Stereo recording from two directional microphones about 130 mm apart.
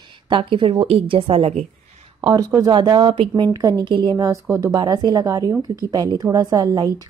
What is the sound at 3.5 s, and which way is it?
A woman's voice, 30° right (ahead or behind).